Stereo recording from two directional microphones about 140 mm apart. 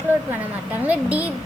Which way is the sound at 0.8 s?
10° right (ahead or behind).